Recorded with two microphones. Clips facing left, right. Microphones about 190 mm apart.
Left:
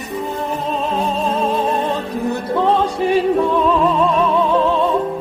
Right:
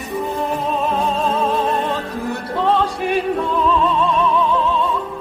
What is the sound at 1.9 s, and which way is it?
Music, 25° left (ahead or behind).